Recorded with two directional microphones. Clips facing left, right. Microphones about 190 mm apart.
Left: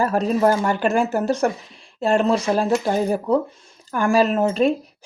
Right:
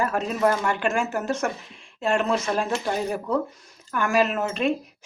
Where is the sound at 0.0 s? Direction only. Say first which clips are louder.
Left 5 dB; 35° left (ahead or behind).